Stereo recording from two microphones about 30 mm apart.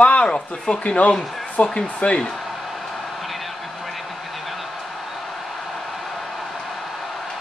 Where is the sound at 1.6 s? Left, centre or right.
Left.